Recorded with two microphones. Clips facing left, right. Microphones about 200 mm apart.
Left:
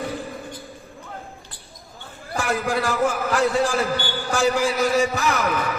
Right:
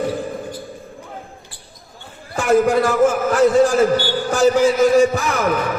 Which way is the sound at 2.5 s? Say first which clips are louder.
Right 10 dB; 40° right (ahead or behind).